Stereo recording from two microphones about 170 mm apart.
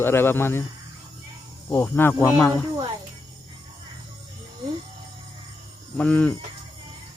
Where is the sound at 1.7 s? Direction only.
10° left (ahead or behind).